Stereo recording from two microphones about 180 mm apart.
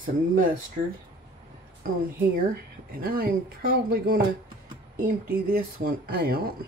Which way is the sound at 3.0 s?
55° right (ahead or behind).